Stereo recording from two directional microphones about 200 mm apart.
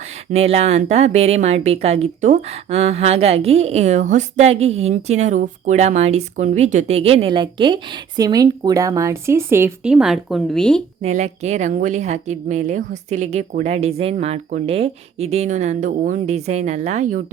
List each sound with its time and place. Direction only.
0.3 s a woman's voice: 30° right (ahead or behind); by 10.8 s 5° left (ahead or behind)
11.0 s a woman's voice: 35° right (ahead or behind)